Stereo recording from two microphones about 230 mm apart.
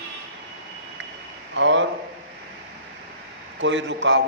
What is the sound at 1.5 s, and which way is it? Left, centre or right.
Speech, right.